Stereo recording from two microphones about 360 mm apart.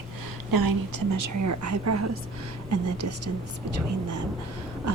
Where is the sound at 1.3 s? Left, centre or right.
Right.